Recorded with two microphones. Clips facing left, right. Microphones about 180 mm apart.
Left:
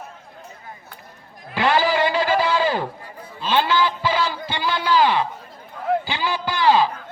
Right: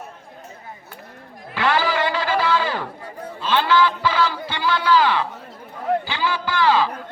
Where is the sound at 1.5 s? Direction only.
15° left (ahead or behind).